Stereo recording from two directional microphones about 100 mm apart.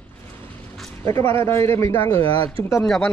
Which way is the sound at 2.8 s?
5° left (ahead or behind).